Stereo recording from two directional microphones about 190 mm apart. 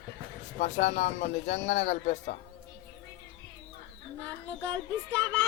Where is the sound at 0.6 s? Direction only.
40° left (ahead or behind).